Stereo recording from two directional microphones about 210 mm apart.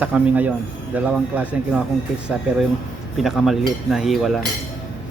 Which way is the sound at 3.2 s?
Centre (ahead or behind).